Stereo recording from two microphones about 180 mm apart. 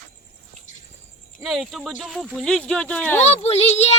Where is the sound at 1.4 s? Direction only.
Centre (ahead or behind).